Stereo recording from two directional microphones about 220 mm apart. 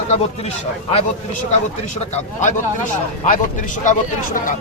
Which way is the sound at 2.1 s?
35° left (ahead or behind).